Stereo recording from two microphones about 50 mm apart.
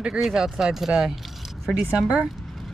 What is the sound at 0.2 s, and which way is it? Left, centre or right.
Speech, centre.